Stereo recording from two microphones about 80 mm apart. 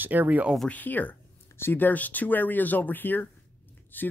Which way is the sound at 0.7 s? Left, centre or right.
Left.